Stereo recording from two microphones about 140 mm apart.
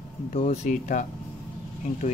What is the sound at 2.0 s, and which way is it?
Speech, 60° left (ahead or behind).